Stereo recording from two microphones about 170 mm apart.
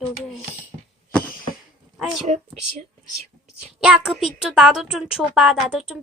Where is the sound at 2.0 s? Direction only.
Centre (ahead or behind).